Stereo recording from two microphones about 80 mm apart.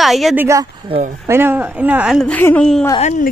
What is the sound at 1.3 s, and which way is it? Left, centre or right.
Speech, right.